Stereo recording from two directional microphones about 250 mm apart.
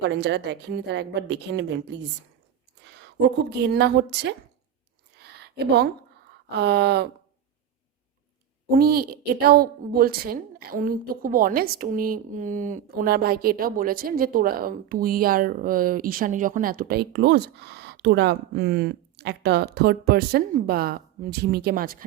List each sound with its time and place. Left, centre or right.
0.1 s a woman's voice: right
3.0 s a woman's voice: right
5.1 s a sound: right
6.6 s a woman's voice: right
8.7 s a woman's voice: right